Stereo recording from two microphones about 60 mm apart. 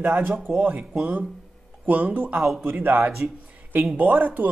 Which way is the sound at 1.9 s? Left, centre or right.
Right.